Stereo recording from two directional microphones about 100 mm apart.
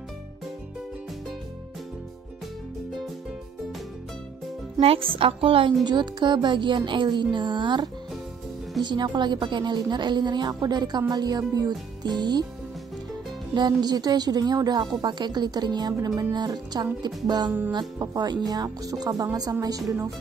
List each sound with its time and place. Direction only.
4.7 s a woman's voice: 70° right (ahead or behind)
5.9 s a woman's voice: 50° right (ahead or behind)
13.6 s a woman's voice: 45° right (ahead or behind)
17.5 s music: 15° right (ahead or behind)
17.7 s speech: 40° right (ahead or behind)